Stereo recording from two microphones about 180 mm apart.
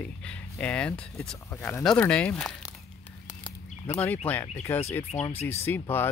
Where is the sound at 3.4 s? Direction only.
25° left (ahead or behind).